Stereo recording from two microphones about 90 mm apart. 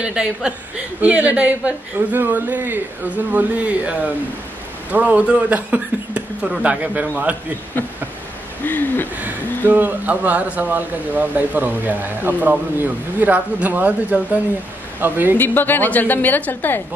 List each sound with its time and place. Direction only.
0.0 s a woman's voice: 10° right (ahead or behind)
8.6 s a woman's voice: 20° left (ahead or behind)
9.7 s speech: 20° right (ahead or behind)
15.3 s a woman's voice: 20° left (ahead or behind)